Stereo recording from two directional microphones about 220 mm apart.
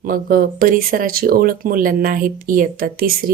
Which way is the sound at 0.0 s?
40° right (ahead or behind).